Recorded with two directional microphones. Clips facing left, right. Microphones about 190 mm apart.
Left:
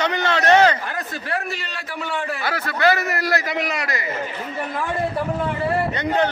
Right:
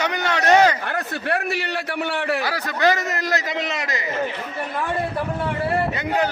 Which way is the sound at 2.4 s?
15° right (ahead or behind).